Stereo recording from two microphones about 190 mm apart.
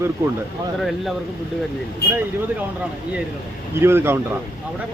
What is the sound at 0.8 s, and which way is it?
Speech, centre (ahead or behind).